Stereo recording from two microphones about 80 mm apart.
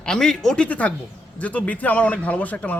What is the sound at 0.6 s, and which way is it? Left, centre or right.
Speech, centre.